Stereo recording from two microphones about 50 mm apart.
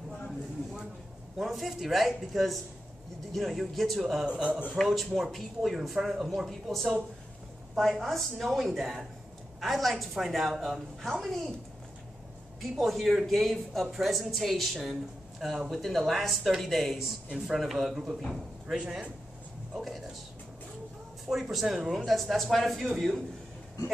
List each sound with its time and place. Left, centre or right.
1.4 s speech: centre
4.3 s a man's voice: right
4.8 s speech: centre
12.7 s speech: centre
21.3 s speech: centre
22.0 s speech: centre